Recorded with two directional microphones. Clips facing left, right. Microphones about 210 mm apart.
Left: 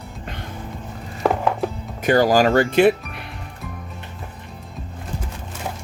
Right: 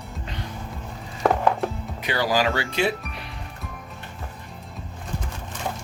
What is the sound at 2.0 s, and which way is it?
Speech, 45° left (ahead or behind).